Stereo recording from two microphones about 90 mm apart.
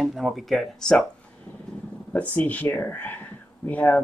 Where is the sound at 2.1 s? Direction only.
15° left (ahead or behind).